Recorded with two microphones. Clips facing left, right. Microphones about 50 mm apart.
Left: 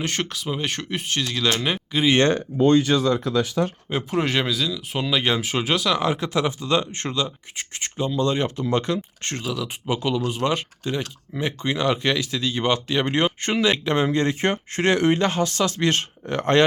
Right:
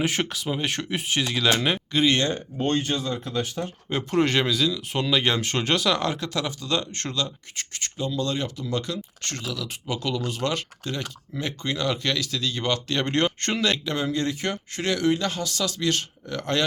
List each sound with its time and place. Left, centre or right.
0.0 s speech: centre
2.9 s speech: left
3.8 s speech: centre
6.0 s speech: centre
13.8 s speech: left